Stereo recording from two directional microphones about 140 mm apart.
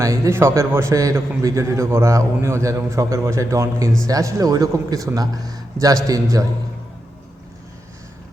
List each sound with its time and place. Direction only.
0.0 s a man's voice: 20° right (ahead or behind)